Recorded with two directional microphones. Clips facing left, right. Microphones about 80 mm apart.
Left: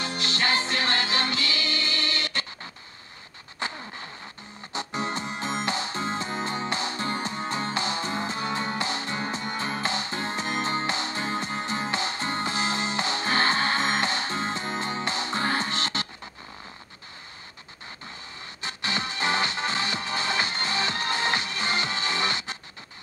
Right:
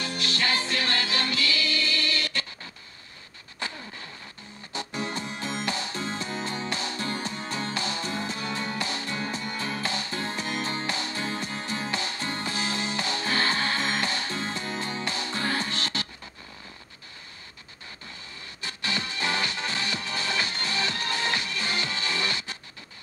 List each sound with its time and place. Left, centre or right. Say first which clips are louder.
0.0 s music: left 1 dB; left
3.5 s a sound: left 3 dB; left
4.7 s music: left 2 dB; left
18.6 s music: left 2 dB; left